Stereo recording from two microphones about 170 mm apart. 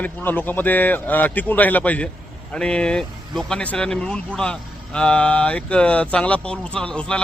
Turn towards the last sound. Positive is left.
turn(degrees=5)  # may be behind; listen again after turning